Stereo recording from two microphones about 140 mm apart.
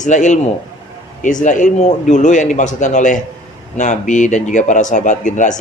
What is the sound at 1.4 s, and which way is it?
A man's voice, 65° left (ahead or behind).